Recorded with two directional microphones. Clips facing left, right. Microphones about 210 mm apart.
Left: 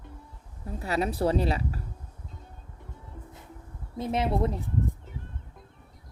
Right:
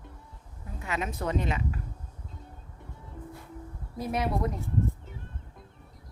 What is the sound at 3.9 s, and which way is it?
Speech, 25° left (ahead or behind).